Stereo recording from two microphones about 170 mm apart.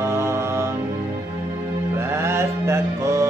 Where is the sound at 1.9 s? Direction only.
15° right (ahead or behind).